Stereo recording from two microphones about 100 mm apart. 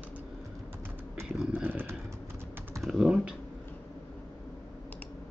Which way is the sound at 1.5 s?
20° right (ahead or behind).